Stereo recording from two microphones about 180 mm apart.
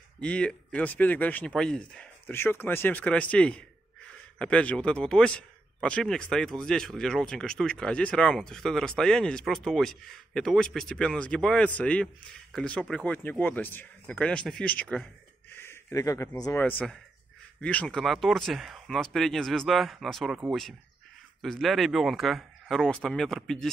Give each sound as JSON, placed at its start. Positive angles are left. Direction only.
{"t": 0.2, "sound": "speech", "side_deg": 5}
{"t": 16.6, "sound": "speech", "side_deg": 5}
{"t": 21.4, "sound": "speech", "side_deg": 0}